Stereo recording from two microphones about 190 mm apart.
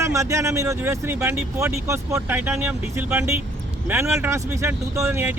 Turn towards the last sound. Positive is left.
turn(degrees=-15)  # may be behind; listen again after turning